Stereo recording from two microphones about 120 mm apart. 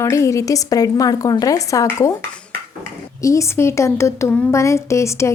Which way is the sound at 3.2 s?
25° left (ahead or behind).